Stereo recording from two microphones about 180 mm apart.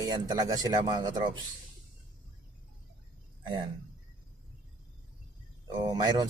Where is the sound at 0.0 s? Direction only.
20° right (ahead or behind).